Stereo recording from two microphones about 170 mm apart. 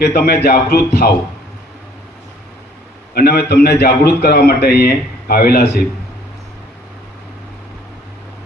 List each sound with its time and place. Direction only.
0.0 s a man's voice: 70° left (ahead or behind)
3.2 s a man's voice: 70° left (ahead or behind)